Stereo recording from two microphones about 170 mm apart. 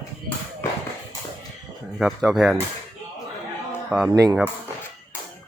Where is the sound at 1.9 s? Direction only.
Centre (ahead or behind).